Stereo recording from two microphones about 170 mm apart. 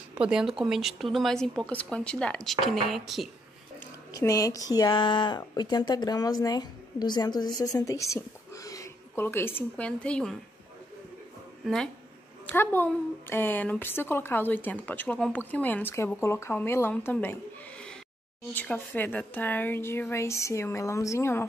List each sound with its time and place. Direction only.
0.1 s a woman's voice: 5° right (ahead or behind)
4.1 s speech: 20° left (ahead or behind)
11.6 s speech: 5° left (ahead or behind)